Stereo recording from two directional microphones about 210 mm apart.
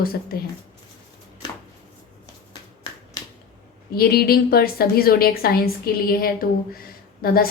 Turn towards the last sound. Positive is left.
turn(degrees=45)  # may be behind; listen again after turning